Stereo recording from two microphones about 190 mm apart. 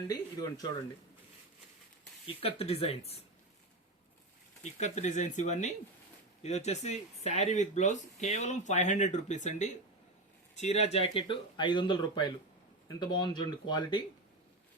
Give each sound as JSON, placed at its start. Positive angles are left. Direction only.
{"t": 0.1, "sound": "speech", "side_deg": 20}
{"t": 2.2, "sound": "speech", "side_deg": 30}
{"t": 4.6, "sound": "speech", "side_deg": 35}